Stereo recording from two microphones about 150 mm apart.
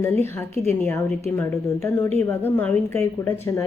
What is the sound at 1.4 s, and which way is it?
A woman's voice, 15° left (ahead or behind).